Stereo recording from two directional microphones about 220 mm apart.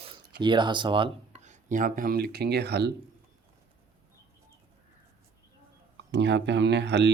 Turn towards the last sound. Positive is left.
turn(degrees=-55)  # may be behind; listen again after turning